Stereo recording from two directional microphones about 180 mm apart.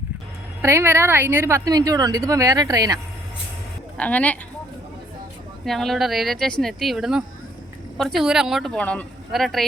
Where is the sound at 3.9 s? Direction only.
10° left (ahead or behind).